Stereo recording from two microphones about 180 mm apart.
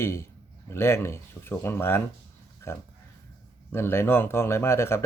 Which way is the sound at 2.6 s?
15° left (ahead or behind).